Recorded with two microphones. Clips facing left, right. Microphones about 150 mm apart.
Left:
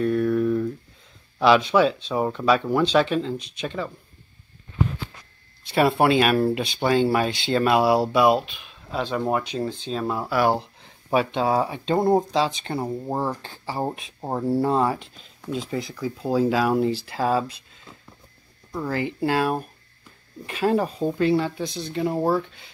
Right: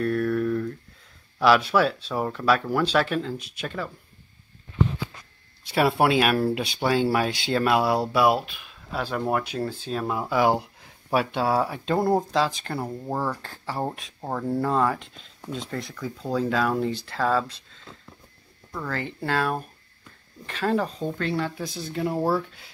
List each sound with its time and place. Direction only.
0.0 s a sound: centre (ahead or behind)
1.4 s speech: 5° right (ahead or behind)
5.6 s speech: 5° right (ahead or behind)
13.1 s speech: 25° left (ahead or behind)
13.4 s speech: centre (ahead or behind)